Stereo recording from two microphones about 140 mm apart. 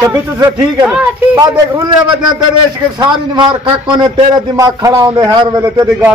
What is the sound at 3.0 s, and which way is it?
A man's voice, 30° right (ahead or behind).